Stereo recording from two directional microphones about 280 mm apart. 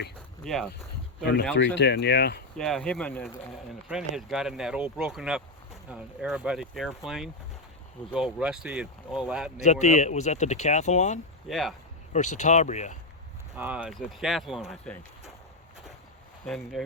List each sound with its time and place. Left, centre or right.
0.4 s speech: centre
1.2 s speech: left
2.6 s speech: centre
9.6 s speech: left
11.4 s speech: centre
12.1 s speech: left
13.6 s speech: centre
16.5 s speech: centre